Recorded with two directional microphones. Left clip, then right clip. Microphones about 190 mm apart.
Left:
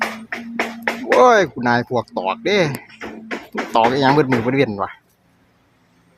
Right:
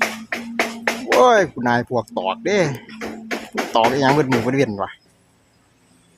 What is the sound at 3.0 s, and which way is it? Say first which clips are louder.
Beatboxing: right 3 dB; 50° right (ahead or behind).